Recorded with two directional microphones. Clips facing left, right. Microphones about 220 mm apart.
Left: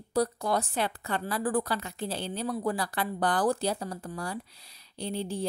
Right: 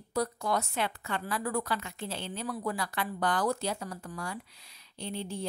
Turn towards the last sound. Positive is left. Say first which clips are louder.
# left 4 dB
turn(degrees=35)  # may be behind; listen again after turning